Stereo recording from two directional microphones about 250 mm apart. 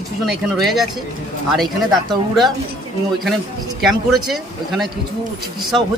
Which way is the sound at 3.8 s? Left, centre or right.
Centre.